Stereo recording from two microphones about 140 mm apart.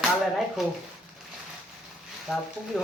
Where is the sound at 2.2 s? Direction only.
Centre (ahead or behind).